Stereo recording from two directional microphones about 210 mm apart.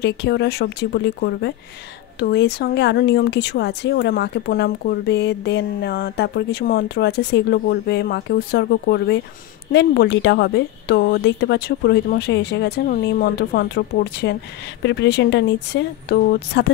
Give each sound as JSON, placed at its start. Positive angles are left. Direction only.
{"t": 0.0, "sound": "speech", "side_deg": 55}